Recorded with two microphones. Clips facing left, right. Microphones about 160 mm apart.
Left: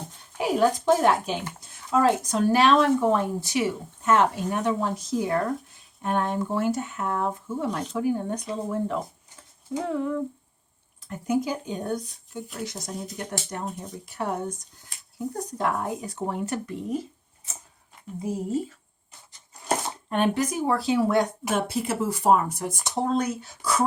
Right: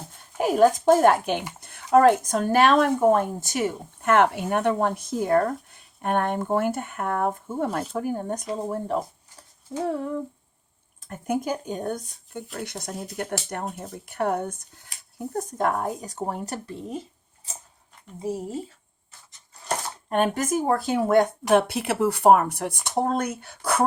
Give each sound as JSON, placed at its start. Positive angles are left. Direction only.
{"t": 0.3, "sound": "speech", "side_deg": -45}
{"t": 5.2, "sound": "speech", "side_deg": -45}
{"t": 9.9, "sound": "humming", "side_deg": -35}
{"t": 11.1, "sound": "speech", "side_deg": -50}
{"t": 12.5, "sound": "speech", "side_deg": -60}
{"t": 20.1, "sound": "speech", "side_deg": -45}
{"t": 21.5, "sound": "speech", "side_deg": -70}